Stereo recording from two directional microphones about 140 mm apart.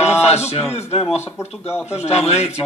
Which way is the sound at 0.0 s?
50° left (ahead or behind).